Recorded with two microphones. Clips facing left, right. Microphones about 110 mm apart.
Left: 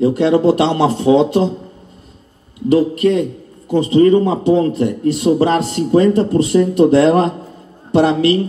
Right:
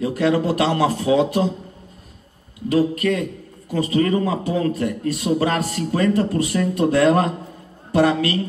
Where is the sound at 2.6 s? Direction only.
25° left (ahead or behind).